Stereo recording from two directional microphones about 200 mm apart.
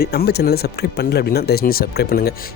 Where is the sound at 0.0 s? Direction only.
50° left (ahead or behind).